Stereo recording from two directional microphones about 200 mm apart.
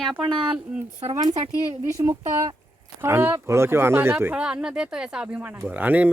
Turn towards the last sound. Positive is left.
turn(degrees=-10)  # may be behind; listen again after turning